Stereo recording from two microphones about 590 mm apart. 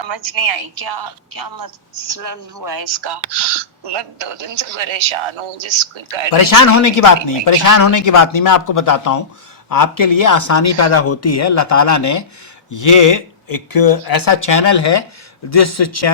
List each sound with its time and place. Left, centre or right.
0.0 s a woman's voice: right
2.6 s speech: right
6.3 s speech: left